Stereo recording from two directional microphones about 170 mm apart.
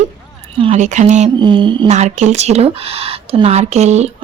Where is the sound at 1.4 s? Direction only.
30° right (ahead or behind).